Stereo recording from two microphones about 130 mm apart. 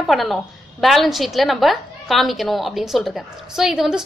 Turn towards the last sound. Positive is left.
turn(degrees=-5)  # may be behind; listen again after turning